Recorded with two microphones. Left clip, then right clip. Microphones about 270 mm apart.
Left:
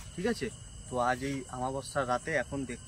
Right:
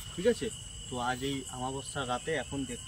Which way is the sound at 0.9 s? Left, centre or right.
Left.